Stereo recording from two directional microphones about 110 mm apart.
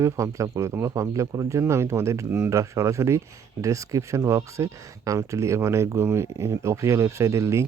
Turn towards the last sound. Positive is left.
turn(degrees=-25)  # may be behind; listen again after turning